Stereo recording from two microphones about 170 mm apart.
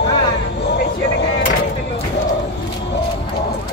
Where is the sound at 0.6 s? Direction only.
80° left.